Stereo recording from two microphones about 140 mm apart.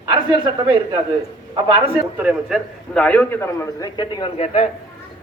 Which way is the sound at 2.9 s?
10° left (ahead or behind).